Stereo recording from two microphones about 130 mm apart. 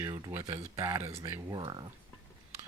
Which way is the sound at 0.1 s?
25° right (ahead or behind).